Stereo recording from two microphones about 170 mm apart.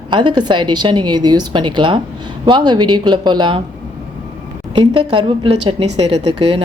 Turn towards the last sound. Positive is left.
turn(degrees=-35)  # may be behind; listen again after turning